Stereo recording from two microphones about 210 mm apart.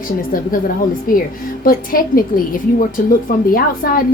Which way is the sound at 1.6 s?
45° left (ahead or behind).